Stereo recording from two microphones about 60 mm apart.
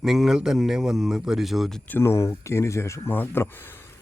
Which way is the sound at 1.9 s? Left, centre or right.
Left.